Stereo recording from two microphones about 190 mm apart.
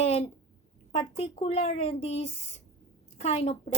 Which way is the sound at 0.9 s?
30° left (ahead or behind).